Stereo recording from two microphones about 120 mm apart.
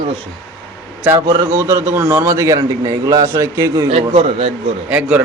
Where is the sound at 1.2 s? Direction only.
25° right (ahead or behind).